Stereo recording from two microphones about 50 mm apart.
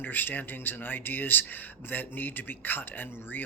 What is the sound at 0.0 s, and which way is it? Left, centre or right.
A man's voice, left.